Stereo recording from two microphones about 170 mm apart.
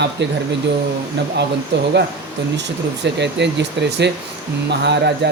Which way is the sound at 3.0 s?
90° right.